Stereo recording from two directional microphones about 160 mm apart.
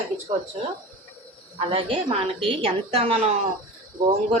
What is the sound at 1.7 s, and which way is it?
A woman's voice, 35° right (ahead or behind).